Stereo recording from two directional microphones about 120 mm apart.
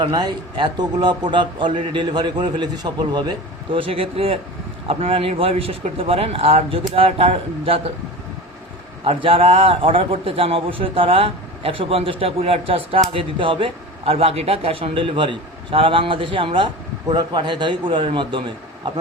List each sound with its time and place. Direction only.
0.0 s a man's voice: 40° right (ahead or behind)
9.0 s a man's voice: 50° right (ahead or behind)